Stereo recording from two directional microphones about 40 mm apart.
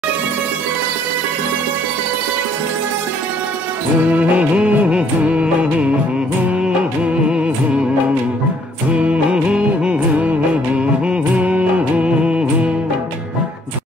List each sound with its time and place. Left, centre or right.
4.1 s music: right
7.2 s music: right
8.9 s music: right